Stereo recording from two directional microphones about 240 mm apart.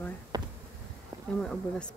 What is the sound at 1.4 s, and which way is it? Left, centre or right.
Speech, centre.